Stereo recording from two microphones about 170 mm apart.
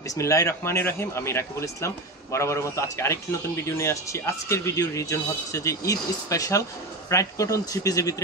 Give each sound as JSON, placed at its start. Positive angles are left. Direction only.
{"t": 0.1, "sound": "a man's voice", "side_deg": 15}